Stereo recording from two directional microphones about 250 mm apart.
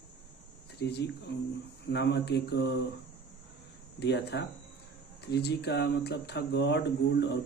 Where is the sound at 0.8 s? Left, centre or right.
Left.